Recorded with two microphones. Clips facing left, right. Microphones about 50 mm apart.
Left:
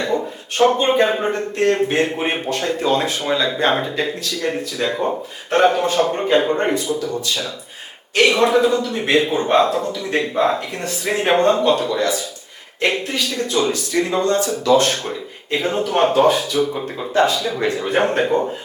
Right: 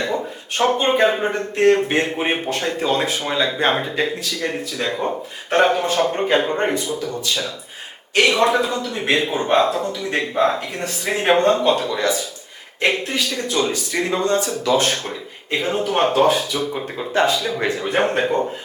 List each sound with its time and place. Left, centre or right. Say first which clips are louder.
0.6 s speech: left 2 dB; centre
1.3 s speech: right 2 dB; centre